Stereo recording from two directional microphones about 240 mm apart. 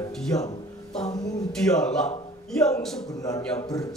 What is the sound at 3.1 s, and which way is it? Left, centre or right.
Speech, centre.